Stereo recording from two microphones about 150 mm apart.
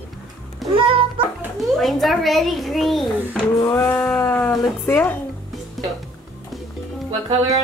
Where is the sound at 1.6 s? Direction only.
Centre (ahead or behind).